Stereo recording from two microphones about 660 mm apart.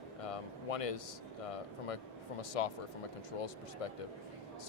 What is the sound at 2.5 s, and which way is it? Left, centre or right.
Speech, left.